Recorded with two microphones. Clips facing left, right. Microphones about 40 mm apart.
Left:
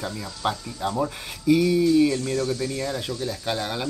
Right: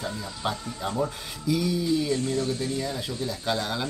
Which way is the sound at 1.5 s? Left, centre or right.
Left.